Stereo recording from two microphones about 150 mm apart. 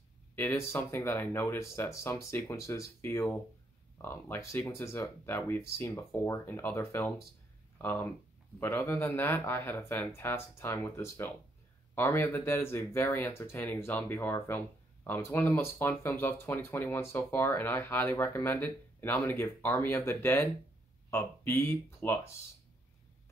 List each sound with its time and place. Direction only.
0.4 s speech: 15° left (ahead or behind)